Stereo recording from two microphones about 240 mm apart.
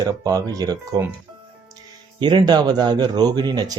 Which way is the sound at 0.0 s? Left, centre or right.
Centre.